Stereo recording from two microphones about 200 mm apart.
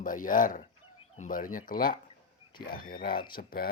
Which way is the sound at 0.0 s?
40° left (ahead or behind).